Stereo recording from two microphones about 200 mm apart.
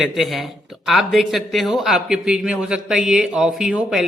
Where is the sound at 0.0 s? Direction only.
Centre (ahead or behind).